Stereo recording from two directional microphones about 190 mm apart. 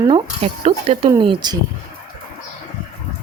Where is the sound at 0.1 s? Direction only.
30° right (ahead or behind).